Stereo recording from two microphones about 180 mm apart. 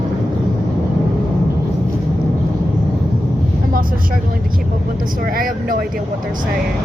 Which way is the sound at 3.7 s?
50° right (ahead or behind).